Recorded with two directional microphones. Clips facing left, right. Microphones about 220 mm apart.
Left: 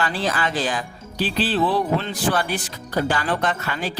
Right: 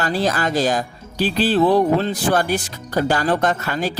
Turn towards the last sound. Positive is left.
turn(degrees=-40)  # may be behind; listen again after turning